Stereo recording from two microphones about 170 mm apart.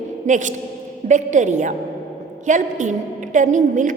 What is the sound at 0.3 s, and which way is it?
A woman's voice, 45° right (ahead or behind).